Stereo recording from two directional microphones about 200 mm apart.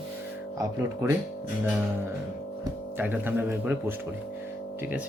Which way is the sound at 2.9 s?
10° right (ahead or behind).